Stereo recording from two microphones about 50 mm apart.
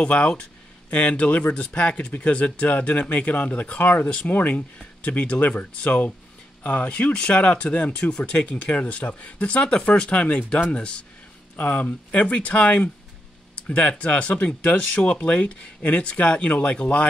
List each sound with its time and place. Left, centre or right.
0.0 s speech: left
11.5 s speech: left